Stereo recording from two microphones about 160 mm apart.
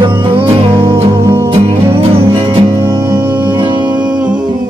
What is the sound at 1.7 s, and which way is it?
Music, 35° right (ahead or behind).